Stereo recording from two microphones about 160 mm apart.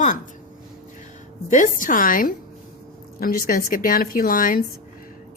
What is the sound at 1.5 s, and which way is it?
A woman's voice, 55° left (ahead or behind).